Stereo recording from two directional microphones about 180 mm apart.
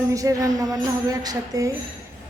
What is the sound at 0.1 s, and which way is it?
Music, 20° right (ahead or behind).